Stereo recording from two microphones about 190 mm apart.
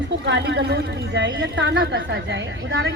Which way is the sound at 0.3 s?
65° right (ahead or behind).